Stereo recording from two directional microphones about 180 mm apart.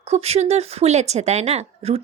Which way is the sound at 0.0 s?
35° right (ahead or behind).